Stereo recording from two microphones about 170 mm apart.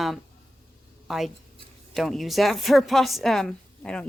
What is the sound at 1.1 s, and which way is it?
A woman's voice, centre (ahead or behind).